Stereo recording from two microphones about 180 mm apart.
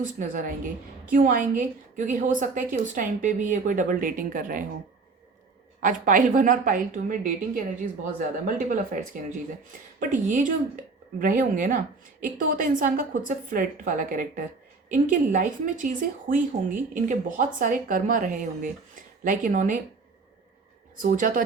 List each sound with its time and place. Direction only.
0.0 s speech: 50° right (ahead or behind)
5.8 s speech: 50° right (ahead or behind)
10.0 s speech: 45° right (ahead or behind)
20.9 s speech: 50° right (ahead or behind)